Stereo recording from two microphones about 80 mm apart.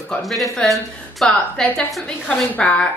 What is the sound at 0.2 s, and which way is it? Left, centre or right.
A woman's voice, centre.